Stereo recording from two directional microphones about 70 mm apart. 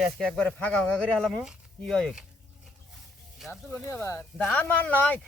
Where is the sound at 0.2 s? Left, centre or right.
Centre.